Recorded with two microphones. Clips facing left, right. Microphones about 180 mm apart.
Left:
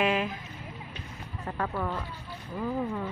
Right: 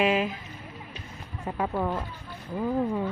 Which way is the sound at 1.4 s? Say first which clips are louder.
Right 4 dB; 15° right (ahead or behind).